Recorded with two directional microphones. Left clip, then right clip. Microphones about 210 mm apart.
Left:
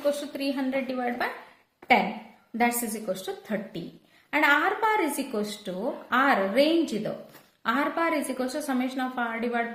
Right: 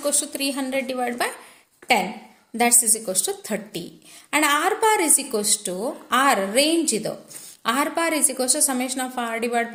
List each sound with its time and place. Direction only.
0.0 s a woman's voice: 40° right (ahead or behind)
2.6 s a woman's voice: 45° right (ahead or behind)